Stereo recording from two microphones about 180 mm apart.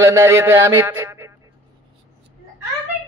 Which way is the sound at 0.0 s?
15° right (ahead or behind).